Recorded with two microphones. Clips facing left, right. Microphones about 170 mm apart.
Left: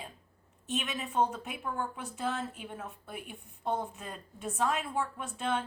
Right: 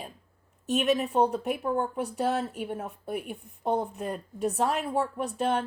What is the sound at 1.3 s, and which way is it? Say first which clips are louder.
Speech: right 11 dB; 60° right (ahead or behind).